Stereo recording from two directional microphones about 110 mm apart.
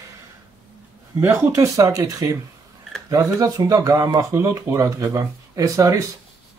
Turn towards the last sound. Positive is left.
turn(degrees=-30)  # may be behind; listen again after turning